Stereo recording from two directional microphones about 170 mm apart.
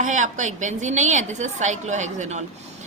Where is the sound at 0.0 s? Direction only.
45° right (ahead or behind).